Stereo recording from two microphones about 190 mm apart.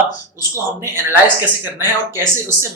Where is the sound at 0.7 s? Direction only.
10° right (ahead or behind).